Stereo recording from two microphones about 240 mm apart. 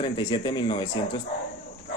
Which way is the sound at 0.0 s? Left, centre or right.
Centre.